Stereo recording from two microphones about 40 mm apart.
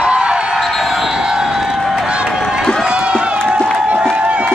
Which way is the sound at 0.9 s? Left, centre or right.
Centre.